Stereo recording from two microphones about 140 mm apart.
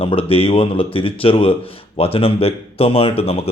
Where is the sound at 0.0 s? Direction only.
40° left (ahead or behind).